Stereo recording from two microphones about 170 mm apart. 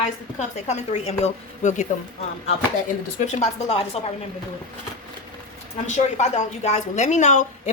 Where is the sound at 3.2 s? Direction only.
40° left (ahead or behind).